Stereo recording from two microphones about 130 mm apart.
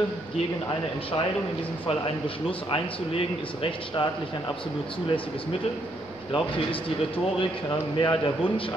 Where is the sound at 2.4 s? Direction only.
45° left (ahead or behind).